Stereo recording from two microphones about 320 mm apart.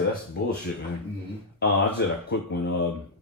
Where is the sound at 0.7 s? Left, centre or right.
Left.